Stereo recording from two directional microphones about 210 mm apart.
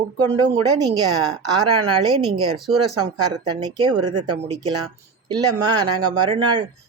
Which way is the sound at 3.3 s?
20° right (ahead or behind).